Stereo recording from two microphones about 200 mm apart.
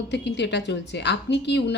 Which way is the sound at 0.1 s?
60° left (ahead or behind).